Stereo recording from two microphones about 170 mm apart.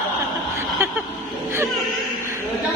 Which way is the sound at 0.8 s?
15° right (ahead or behind).